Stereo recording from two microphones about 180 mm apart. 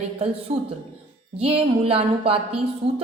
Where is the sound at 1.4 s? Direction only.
30° right (ahead or behind).